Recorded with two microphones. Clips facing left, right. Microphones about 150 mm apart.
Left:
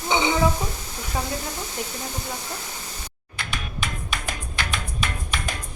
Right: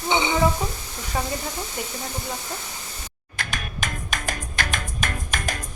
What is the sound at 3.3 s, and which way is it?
Music, 45° right (ahead or behind).